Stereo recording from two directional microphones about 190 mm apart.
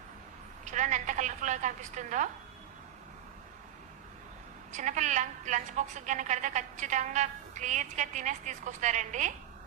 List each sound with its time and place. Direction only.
0.6 s a woman's voice: 40° right (ahead or behind)
4.7 s a woman's voice: 40° right (ahead or behind)